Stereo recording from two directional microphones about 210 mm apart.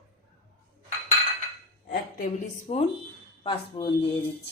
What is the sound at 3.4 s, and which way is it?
Speech, 20° left (ahead or behind).